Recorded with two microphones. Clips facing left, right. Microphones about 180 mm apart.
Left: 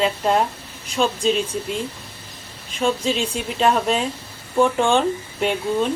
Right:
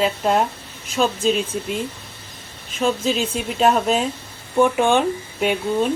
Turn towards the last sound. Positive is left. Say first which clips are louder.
# right 1 dB
turn(degrees=-5)  # may be behind; listen again after turning